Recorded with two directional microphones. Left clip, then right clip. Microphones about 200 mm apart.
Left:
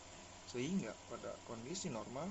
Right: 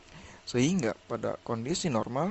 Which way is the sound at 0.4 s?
55° right (ahead or behind).